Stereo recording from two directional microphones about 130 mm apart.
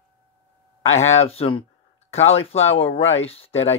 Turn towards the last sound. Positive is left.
turn(degrees=50)  # may be behind; listen again after turning